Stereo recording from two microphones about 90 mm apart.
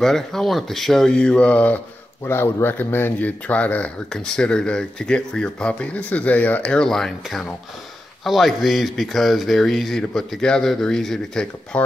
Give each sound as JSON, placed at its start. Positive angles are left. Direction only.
{"t": 0.0, "sound": "speech", "side_deg": 5}
{"t": 2.2, "sound": "speech", "side_deg": 25}